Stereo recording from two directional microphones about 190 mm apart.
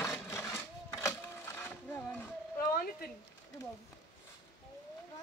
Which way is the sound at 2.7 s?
50° left (ahead or behind).